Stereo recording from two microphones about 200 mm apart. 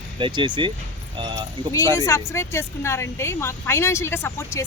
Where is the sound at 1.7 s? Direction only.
15° left (ahead or behind).